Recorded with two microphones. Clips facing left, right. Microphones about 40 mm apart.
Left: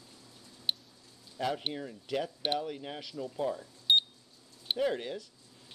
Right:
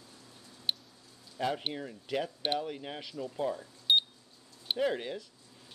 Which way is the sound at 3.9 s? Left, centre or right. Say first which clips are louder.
Left 1 dB; centre.